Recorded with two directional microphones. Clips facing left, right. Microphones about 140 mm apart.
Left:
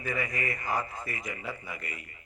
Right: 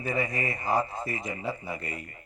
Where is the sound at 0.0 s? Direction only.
30° right (ahead or behind).